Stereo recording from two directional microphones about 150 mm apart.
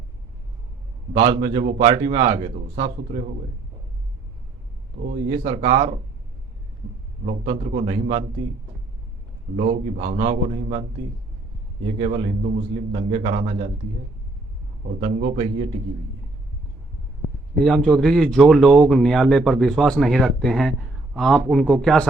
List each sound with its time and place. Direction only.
1.2 s a man's voice: 35° right (ahead or behind)
5.0 s a man's voice: 55° right (ahead or behind)
7.5 s a man's voice: 55° right (ahead or behind)
7.9 s a man's voice: 35° right (ahead or behind)
9.6 s a man's voice: 60° right (ahead or behind); by 10.8 s 45° right (ahead or behind)
11.9 s a man's voice: 40° right (ahead or behind)
13.3 s a man's voice: 50° right (ahead or behind)
14.8 s a man's voice: 60° right (ahead or behind)
17.5 s speech: centre (ahead or behind)